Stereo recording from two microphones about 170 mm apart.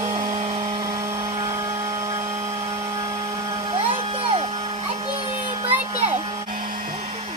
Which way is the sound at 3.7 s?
30° right (ahead or behind).